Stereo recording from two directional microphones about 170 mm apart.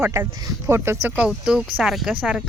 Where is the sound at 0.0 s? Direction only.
15° right (ahead or behind).